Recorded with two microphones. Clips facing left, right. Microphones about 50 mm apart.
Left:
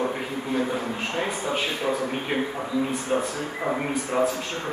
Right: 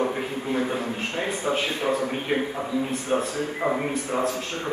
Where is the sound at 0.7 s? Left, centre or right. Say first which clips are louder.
Left 1 dB; left.